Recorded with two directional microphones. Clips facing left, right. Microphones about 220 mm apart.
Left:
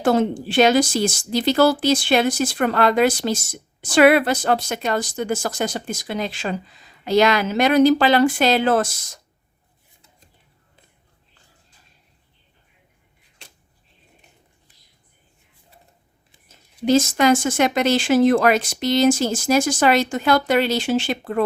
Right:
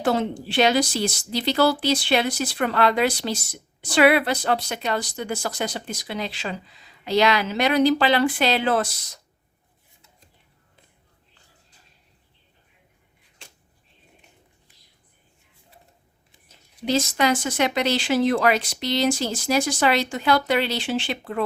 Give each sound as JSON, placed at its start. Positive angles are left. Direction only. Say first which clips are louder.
{"t": 0.0, "sound": "a woman's voice", "louder": "left 4 dB", "side_deg": 45}
{"t": 16.8, "sound": "a woman's voice", "louder": "left 6 dB", "side_deg": 45}